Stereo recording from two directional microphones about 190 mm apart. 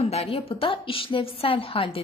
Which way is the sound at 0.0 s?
35° left (ahead or behind).